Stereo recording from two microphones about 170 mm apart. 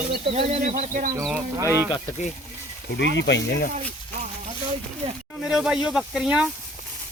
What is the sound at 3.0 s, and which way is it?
Speech, 90° left.